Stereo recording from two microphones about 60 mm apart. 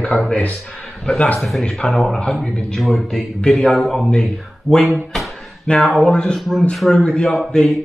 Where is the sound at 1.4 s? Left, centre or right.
Centre.